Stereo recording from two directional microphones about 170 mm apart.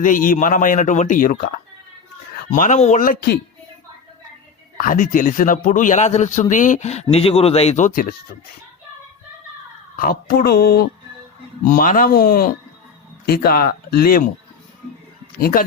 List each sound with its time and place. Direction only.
0.0 s a man's voice: 50° left (ahead or behind)
2.5 s a man's voice: 45° left (ahead or behind)
4.8 s a man's voice: 50° left (ahead or behind)
9.9 s speech: 55° left (ahead or behind)
11.6 s speech: 55° left (ahead or behind)
15.4 s speech: 60° left (ahead or behind)